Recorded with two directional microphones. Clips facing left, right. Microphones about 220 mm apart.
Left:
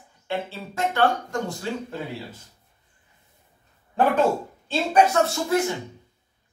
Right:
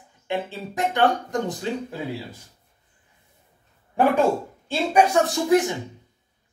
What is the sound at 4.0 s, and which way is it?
Speech, 10° right (ahead or behind).